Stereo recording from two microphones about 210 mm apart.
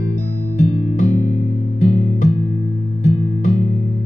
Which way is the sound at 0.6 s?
35° left (ahead or behind).